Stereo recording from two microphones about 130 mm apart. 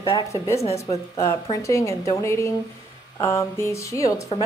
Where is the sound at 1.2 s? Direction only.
25° left (ahead or behind).